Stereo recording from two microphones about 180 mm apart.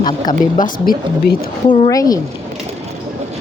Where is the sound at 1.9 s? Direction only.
20° left (ahead or behind).